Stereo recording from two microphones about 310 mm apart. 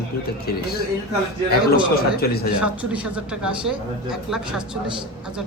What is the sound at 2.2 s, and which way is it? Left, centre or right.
Speech, left.